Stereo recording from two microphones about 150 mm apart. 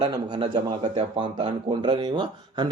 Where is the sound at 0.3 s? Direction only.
35° right (ahead or behind).